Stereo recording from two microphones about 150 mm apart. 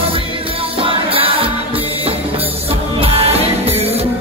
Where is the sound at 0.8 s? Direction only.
40° right (ahead or behind).